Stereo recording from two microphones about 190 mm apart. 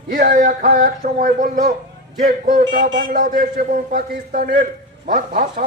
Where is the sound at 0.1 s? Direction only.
45° right (ahead or behind).